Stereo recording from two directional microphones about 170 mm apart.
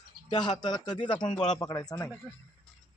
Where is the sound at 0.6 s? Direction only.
25° left (ahead or behind).